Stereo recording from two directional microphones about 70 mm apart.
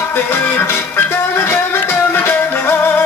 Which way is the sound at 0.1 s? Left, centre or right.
Left.